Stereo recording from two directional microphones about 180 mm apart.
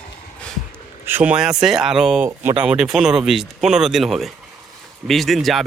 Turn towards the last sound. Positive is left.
turn(degrees=0)  # may be behind; listen again after turning